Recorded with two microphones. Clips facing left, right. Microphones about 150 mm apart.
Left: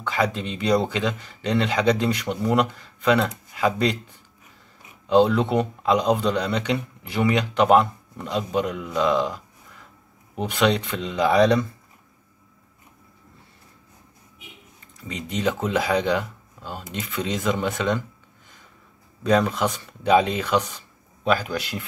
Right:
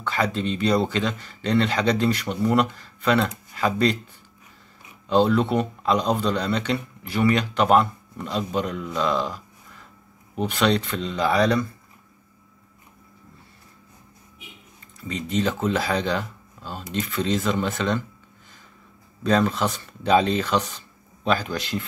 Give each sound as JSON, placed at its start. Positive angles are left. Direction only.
{"t": 0.0, "sound": "speech", "side_deg": 15}
{"t": 5.0, "sound": "speech", "side_deg": 15}
{"t": 15.0, "sound": "speech", "side_deg": 15}
{"t": 19.2, "sound": "speech", "side_deg": 10}